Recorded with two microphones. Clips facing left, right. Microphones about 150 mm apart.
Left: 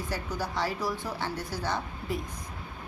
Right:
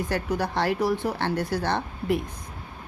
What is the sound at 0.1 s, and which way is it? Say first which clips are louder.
A woman's voice: right 4 dB; 65° right (ahead or behind).